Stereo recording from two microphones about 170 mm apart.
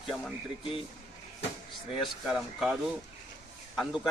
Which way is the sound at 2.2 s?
Centre (ahead or behind).